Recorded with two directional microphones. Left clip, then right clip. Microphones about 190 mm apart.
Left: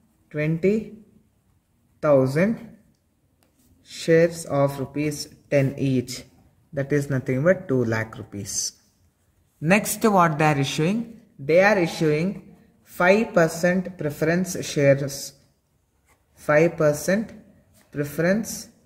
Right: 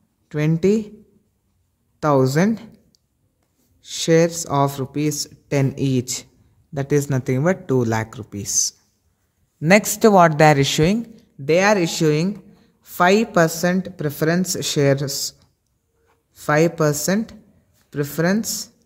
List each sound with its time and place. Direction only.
0.3 s speech: 60° right (ahead or behind)
2.0 s speech: 65° right (ahead or behind)
9.6 s speech: 40° right (ahead or behind)
11.4 s speech: 65° right (ahead or behind)
16.4 s speech: 65° right (ahead or behind)